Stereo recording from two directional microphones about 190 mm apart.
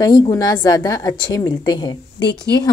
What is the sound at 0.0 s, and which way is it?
A woman's voice, 20° left (ahead or behind).